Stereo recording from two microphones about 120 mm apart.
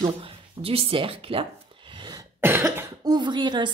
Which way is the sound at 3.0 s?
35° right (ahead or behind).